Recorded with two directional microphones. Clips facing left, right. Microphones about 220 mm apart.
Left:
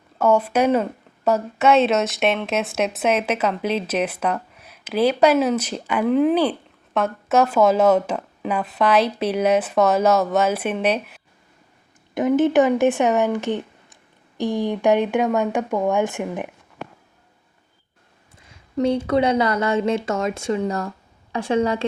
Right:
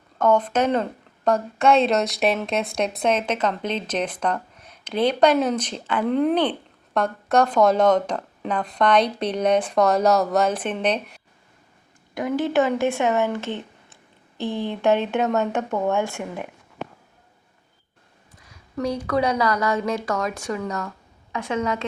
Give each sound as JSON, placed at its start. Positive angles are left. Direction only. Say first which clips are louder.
{"t": 0.2, "sound": "speech", "louder": "left 2 dB", "side_deg": 10}
{"t": 12.1, "sound": "speech", "louder": "left 5 dB", "side_deg": 20}
{"t": 18.4, "sound": "a woman's voice", "louder": "left 6 dB", "side_deg": 25}